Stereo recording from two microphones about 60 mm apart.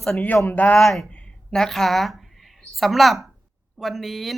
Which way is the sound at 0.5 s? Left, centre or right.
Left.